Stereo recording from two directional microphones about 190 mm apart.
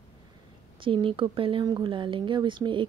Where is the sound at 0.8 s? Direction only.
25° right (ahead or behind).